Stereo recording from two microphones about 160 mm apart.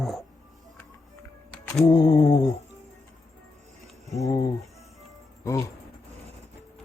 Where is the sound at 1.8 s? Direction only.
25° left (ahead or behind).